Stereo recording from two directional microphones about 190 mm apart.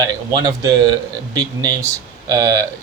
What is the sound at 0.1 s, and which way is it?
Speech, 20° right (ahead or behind).